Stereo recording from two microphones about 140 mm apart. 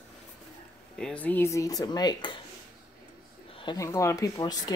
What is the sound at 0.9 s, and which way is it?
Speech, 5° left (ahead or behind).